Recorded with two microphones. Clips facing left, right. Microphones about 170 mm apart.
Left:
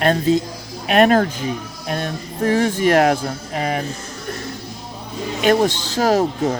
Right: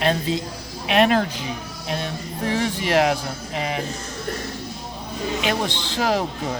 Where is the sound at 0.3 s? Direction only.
45° left (ahead or behind).